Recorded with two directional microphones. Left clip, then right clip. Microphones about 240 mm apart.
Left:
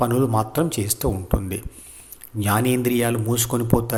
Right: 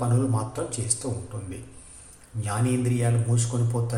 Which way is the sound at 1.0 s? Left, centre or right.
Left.